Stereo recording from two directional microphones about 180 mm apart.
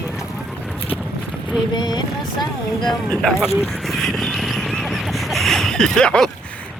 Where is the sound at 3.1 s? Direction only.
5° left (ahead or behind).